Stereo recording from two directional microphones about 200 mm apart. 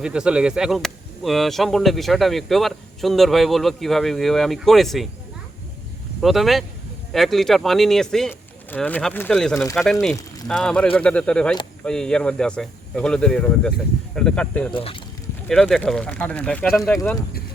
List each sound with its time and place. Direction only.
0.0 s speech: 5° right (ahead or behind)
6.2 s speech: centre (ahead or behind)
14.7 s speech: 25° left (ahead or behind)
15.4 s speech: centre (ahead or behind)